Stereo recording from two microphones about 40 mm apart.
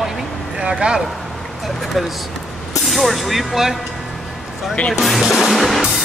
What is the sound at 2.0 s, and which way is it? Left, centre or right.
Speech, centre.